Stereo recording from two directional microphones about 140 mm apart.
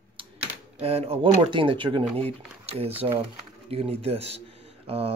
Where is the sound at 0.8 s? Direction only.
45° right (ahead or behind).